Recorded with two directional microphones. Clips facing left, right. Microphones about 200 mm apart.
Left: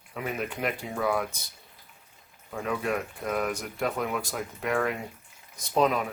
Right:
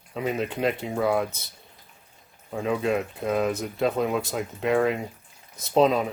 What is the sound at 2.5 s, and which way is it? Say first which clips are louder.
Speech: right 5 dB; 25° right (ahead or behind).